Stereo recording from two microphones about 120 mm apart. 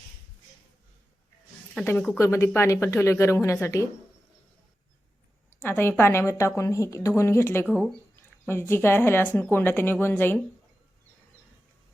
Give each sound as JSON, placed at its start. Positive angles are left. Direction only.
{"t": 1.8, "sound": "a woman's voice", "side_deg": 15}
{"t": 5.5, "sound": "a sound", "side_deg": 20}
{"t": 6.0, "sound": "a woman's voice", "side_deg": 20}